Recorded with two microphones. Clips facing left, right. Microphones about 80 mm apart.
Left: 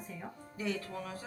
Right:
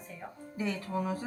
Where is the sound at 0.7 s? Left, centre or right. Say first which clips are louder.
Right 6 dB; right.